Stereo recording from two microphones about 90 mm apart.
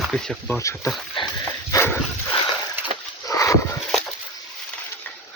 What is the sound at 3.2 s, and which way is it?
Horse, 40° left (ahead or behind).